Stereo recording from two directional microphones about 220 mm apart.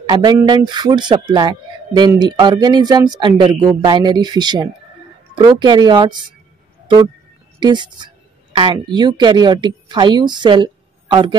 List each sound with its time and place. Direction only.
0.1 s speech: 20° right (ahead or behind)
7.6 s speech: 20° right (ahead or behind)